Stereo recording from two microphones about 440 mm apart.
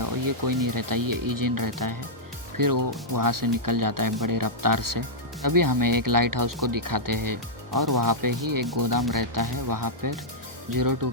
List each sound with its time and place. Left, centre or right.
0.0 s speech: right